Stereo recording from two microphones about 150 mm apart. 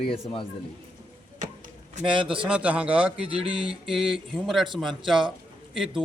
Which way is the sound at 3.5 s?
35° right (ahead or behind).